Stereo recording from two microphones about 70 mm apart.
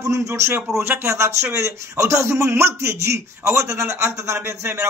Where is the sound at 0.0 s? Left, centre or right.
Right.